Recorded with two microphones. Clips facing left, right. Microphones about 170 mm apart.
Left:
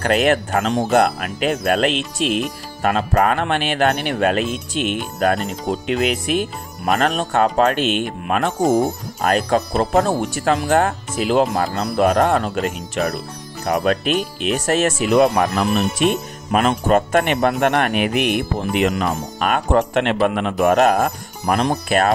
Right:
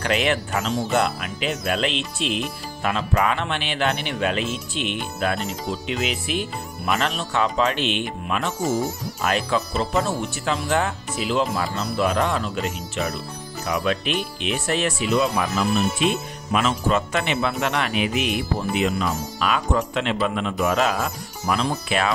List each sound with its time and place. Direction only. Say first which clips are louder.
0.0 s speech: left 6 dB; 45° left (ahead or behind)
15.0 s speech: left 7 dB; 60° left (ahead or behind)
18.7 s speech: left 5 dB; 75° left (ahead or behind)
18.9 s speech: left 3 dB; 50° left (ahead or behind)